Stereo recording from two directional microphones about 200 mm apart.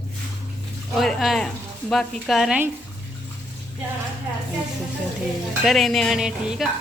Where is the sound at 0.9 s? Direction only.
Centre (ahead or behind).